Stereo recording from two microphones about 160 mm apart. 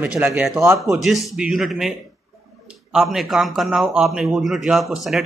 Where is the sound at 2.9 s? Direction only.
Centre (ahead or behind).